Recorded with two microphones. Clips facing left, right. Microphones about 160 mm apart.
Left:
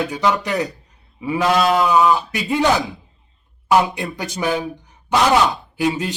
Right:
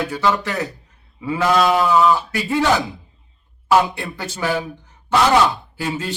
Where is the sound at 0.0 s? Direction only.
15° left (ahead or behind).